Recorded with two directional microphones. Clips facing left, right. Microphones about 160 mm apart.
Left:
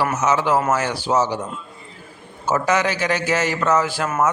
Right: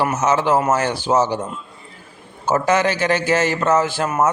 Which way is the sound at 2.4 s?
30° right (ahead or behind).